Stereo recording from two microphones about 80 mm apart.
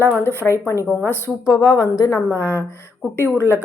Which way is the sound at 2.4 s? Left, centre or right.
Left.